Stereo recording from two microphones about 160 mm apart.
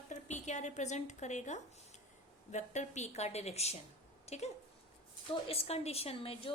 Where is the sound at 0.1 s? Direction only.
50° left (ahead or behind).